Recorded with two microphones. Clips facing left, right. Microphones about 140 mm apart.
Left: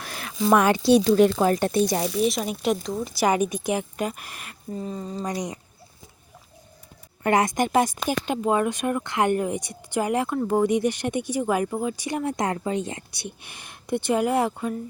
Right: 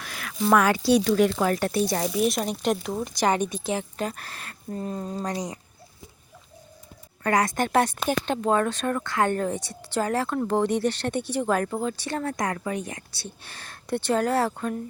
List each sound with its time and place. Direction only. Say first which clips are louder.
0.0 s a sound: left 2 dB; 30° left (ahead or behind)
0.5 s speech: left 2 dB; 20° left (ahead or behind)
2.1 s speech: even; centre (ahead or behind)
4.8 s speech: right 1 dB; centre (ahead or behind)
7.2 s speech: left 2 dB; 20° left (ahead or behind)